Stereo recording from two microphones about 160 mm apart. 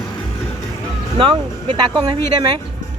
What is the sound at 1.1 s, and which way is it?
Speech, 30° right (ahead or behind).